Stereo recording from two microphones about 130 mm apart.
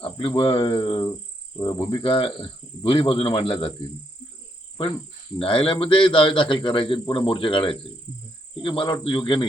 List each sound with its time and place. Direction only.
0.0 s speech: 45° left (ahead or behind)
0.8 s a man's voice: 30° left (ahead or behind); by 3.8 s 50° left (ahead or behind)
5.4 s a man's voice: 45° left (ahead or behind)